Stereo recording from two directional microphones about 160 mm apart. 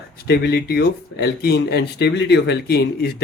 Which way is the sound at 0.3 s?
85° left.